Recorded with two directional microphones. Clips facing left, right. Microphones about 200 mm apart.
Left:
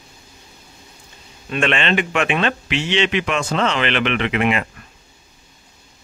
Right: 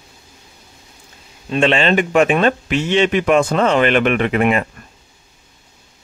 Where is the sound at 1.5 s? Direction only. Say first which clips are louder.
Right 5 dB; 30° right (ahead or behind).